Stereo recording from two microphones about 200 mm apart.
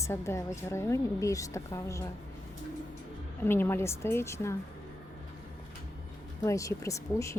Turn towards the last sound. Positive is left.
turn(degrees=15)  # may be behind; listen again after turning